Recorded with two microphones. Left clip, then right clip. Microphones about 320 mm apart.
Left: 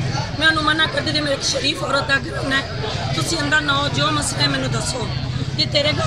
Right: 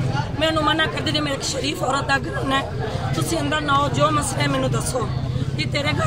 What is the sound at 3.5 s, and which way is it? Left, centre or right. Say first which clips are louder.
Speech: left 2 dB; centre.